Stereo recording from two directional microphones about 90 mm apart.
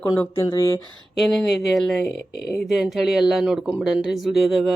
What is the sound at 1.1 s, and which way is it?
Speech, 5° left (ahead or behind).